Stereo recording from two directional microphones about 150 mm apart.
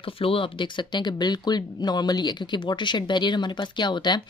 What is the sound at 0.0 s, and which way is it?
Speech, 35° left (ahead or behind).